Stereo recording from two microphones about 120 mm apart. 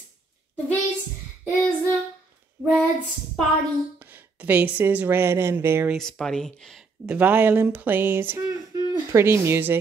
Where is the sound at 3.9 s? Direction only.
15° right (ahead or behind).